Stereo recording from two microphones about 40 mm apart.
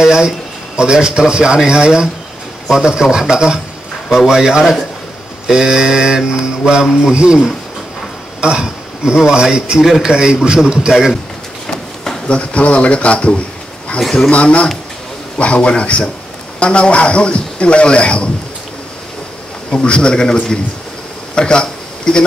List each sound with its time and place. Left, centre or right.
0.0 s speech: centre
11.6 s a sound: centre
12.3 s a man's voice: left
13.9 s a man's voice: centre
14.3 s a man's voice: left
19.7 s a man's voice: left
21.4 s a sound: left